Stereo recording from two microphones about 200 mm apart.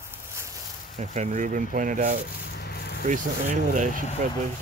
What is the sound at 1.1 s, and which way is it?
Speech, 35° right (ahead or behind).